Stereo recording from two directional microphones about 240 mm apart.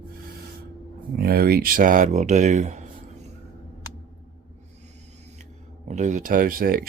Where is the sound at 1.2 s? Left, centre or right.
Right.